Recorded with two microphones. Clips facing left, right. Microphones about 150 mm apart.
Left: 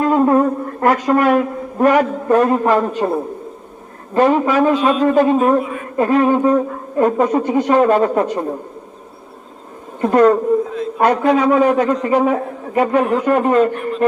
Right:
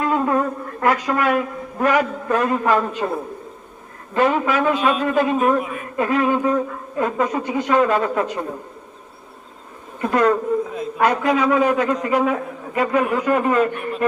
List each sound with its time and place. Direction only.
0.0 s a sound: 35° left (ahead or behind)
1.8 s a man's voice: 40° left (ahead or behind)
3.0 s a man's voice: 25° left (ahead or behind)
4.1 s a man's voice: 35° left (ahead or behind)
10.0 s a man's voice: 40° left (ahead or behind)